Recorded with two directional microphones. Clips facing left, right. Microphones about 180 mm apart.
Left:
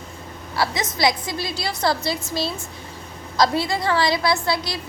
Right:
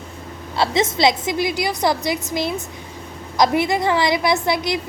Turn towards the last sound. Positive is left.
turn(degrees=-20)  # may be behind; listen again after turning